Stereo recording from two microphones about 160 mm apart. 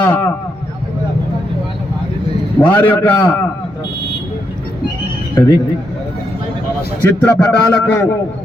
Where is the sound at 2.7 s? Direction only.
10° left (ahead or behind).